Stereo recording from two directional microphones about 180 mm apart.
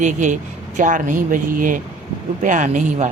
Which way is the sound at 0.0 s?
45° right (ahead or behind).